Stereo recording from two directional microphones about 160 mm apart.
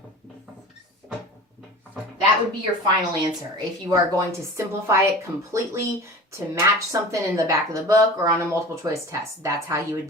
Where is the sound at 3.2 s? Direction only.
25° right (ahead or behind).